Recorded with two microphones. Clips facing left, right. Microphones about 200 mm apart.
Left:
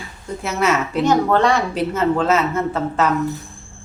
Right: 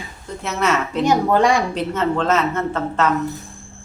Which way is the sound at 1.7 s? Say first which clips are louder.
Left 2 dB; 5° left (ahead or behind).